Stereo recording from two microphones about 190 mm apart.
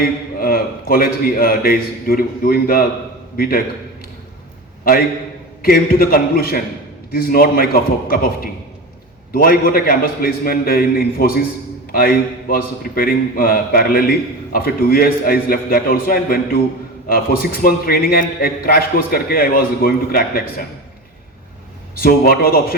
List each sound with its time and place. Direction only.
0.0 s a man's voice: 50° left (ahead or behind)
4.9 s a man's voice: 50° left (ahead or behind)
21.9 s a man's voice: 50° left (ahead or behind)